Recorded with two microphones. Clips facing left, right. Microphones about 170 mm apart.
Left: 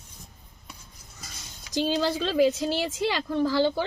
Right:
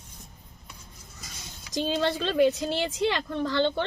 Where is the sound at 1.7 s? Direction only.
Centre (ahead or behind).